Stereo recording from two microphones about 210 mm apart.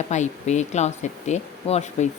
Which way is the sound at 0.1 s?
35° left (ahead or behind).